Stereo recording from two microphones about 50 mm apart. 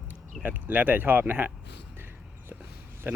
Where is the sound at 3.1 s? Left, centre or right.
Right.